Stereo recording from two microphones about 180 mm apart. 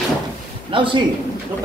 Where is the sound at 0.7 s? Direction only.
30° right (ahead or behind).